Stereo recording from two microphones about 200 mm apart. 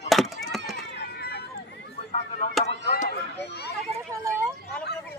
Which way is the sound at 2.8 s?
50° left (ahead or behind).